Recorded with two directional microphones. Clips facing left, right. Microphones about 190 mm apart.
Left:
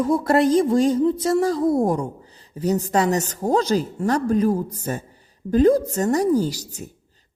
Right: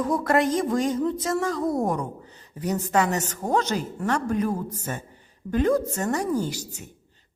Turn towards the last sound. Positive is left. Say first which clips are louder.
# left 4 dB
turn(degrees=35)  # may be behind; listen again after turning